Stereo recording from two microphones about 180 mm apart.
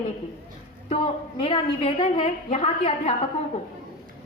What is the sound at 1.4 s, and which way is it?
A woman's voice, 30° left (ahead or behind).